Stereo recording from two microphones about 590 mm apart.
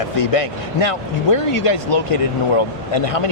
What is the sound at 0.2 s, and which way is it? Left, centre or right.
Speech, left.